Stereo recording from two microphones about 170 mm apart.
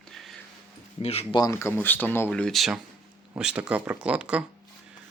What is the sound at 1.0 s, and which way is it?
Speech, 35° left (ahead or behind).